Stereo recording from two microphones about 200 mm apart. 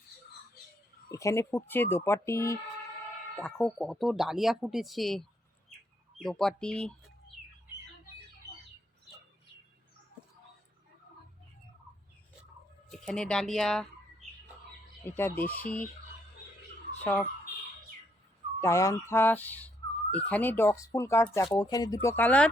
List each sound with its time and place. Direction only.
1.1 s speech: 15° left (ahead or behind)
12.9 s speech: 5° left (ahead or behind)
15.0 s speech: 10° left (ahead or behind)
17.0 s speech: 10° left (ahead or behind)
18.6 s speech: 15° left (ahead or behind)